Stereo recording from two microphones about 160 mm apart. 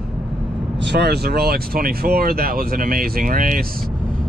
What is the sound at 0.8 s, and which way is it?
Speech, 90° right.